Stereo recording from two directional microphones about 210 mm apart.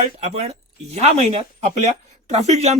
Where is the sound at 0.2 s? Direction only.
30° right (ahead or behind).